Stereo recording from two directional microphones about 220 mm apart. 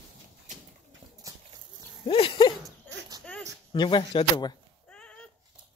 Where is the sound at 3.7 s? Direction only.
20° left (ahead or behind).